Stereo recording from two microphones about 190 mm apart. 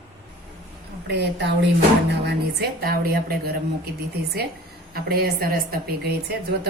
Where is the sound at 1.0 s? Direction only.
65° right (ahead or behind).